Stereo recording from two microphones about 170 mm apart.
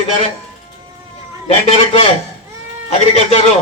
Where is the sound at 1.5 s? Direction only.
35° left (ahead or behind).